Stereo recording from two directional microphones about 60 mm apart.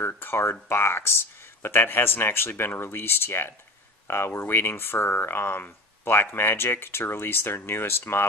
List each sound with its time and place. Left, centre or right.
0.0 s speech: left